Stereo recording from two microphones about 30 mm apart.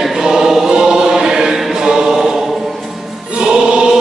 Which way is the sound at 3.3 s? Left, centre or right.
Right.